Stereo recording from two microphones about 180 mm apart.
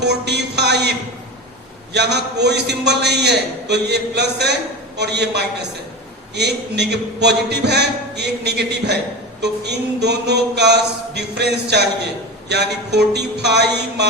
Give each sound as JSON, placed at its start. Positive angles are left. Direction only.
{"t": 0.0, "sound": "a man's voice", "side_deg": -70}